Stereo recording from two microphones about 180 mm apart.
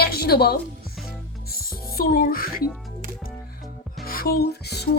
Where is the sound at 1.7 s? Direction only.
55° left (ahead or behind).